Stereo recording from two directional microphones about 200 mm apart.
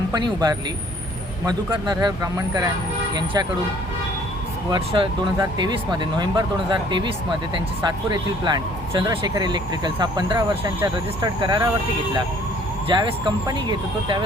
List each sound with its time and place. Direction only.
0.1 s speech: 20° right (ahead or behind)
4.7 s speech: 25° right (ahead or behind)
10.5 s speech: 10° right (ahead or behind)
10.9 s speech: 20° right (ahead or behind)
12.9 s speech: 20° right (ahead or behind)